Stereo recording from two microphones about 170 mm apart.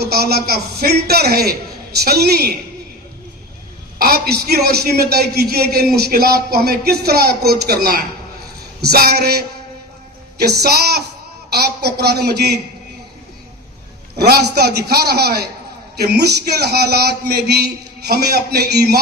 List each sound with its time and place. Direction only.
0.0 s a man's voice: 65° right (ahead or behind)
3.9 s a man's voice: 65° right (ahead or behind)
14.2 s a man's voice: 70° right (ahead or behind)